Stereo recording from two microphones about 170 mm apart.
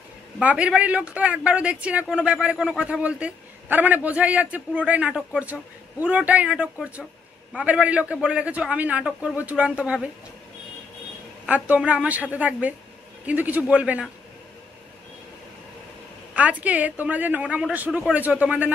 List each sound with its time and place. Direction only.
0.4 s speech: 5° right (ahead or behind)
11.7 s speech: 10° right (ahead or behind)
16.3 s speech: 10° right (ahead or behind)